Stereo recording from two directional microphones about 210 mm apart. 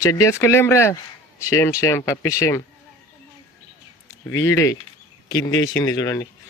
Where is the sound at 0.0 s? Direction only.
15° left (ahead or behind).